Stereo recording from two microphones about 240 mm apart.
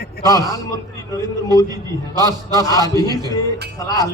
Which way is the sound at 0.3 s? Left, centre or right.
Centre.